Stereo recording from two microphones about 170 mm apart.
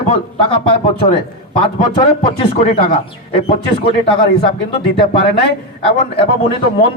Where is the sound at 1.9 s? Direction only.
30° left (ahead or behind).